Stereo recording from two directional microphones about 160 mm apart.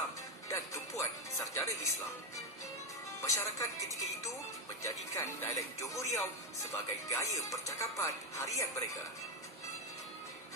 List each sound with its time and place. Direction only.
0.5 s music: 20° left (ahead or behind)
3.2 s speech: 15° left (ahead or behind)
4.8 s speech: 15° left (ahead or behind)